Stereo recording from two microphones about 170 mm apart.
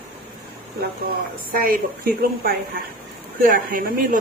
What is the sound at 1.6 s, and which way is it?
Speech, 55° right (ahead or behind).